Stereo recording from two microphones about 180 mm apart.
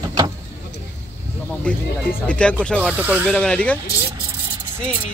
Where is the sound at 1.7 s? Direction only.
5° left (ahead or behind).